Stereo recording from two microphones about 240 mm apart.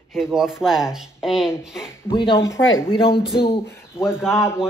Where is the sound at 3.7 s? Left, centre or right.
Centre.